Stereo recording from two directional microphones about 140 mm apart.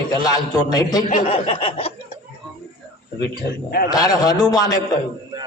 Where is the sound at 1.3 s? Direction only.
40° left (ahead or behind).